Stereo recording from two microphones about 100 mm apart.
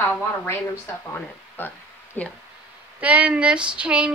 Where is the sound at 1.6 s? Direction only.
20° left (ahead or behind).